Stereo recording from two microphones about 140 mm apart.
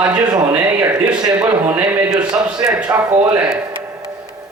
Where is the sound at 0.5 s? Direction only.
15° right (ahead or behind).